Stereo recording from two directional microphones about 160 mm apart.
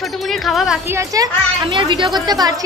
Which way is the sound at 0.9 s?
20° right (ahead or behind).